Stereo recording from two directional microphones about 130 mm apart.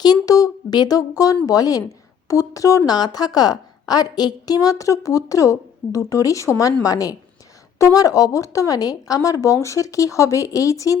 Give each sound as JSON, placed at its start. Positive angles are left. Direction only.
{"t": 0.0, "sound": "a woman's voice", "side_deg": 30}